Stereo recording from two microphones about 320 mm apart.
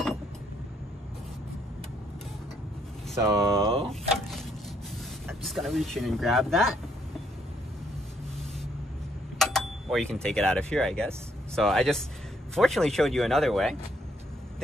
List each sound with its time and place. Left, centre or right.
3.2 s speech: centre
5.2 s speech: centre
9.4 s speech: centre